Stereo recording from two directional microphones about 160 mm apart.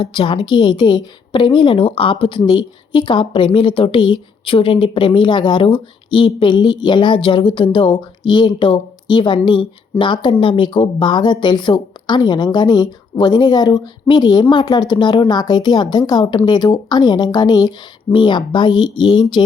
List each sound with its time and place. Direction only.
0.0 s a woman's voice: 30° left (ahead or behind)